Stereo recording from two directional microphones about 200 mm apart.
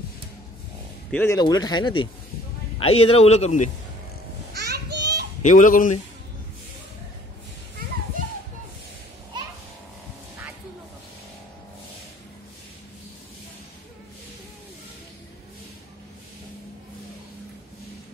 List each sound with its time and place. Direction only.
1.1 s a man's voice: 15° left (ahead or behind); by 3.7 s 35° left (ahead or behind)
4.6 s children playing: 55° right (ahead or behind)
5.4 s a man's voice: 40° left (ahead or behind)